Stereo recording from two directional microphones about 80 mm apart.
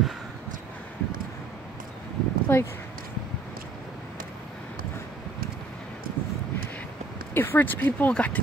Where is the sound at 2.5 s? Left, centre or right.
Left.